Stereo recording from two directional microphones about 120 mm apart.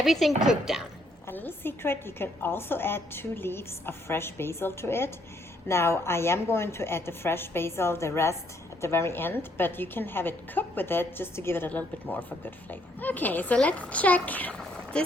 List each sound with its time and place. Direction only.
0.0 s speech: centre (ahead or behind)
1.3 s a woman's voice: 15° left (ahead or behind)